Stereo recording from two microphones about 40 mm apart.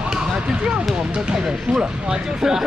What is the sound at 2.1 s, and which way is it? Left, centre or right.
Speech, centre.